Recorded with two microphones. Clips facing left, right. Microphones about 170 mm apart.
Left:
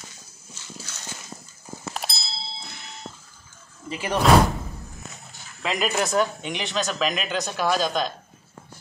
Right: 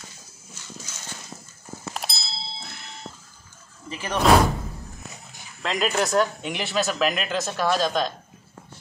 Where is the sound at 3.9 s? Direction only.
15° left (ahead or behind).